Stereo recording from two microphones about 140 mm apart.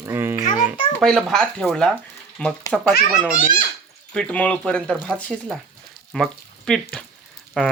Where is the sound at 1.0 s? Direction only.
Centre (ahead or behind).